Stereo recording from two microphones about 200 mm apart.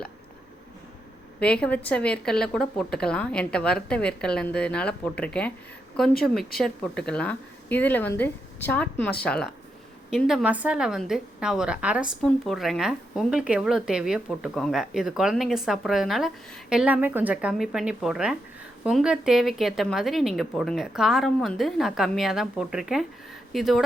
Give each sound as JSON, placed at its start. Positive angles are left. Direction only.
{"t": 1.4, "sound": "speech", "side_deg": 5}
{"t": 6.6, "sound": "speech", "side_deg": 5}